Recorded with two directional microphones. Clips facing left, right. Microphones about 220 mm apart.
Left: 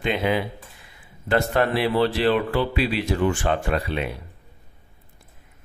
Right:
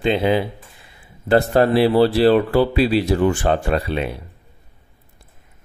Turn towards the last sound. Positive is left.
turn(degrees=-35)  # may be behind; listen again after turning